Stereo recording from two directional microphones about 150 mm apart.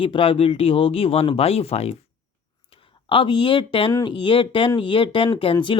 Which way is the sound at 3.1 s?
35° left (ahead or behind).